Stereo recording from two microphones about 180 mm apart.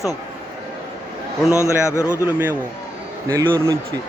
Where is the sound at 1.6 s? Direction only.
15° left (ahead or behind).